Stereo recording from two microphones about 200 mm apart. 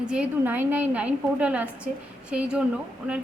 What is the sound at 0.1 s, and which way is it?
A woman's voice, 5° right (ahead or behind).